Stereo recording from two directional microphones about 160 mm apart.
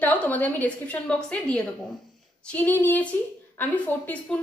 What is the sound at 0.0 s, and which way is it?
A woman's voice, 10° left (ahead or behind).